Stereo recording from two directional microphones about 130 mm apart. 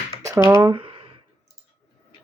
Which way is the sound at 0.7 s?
45° right (ahead or behind).